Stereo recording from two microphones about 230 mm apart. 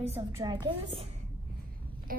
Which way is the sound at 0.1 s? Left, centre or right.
Centre.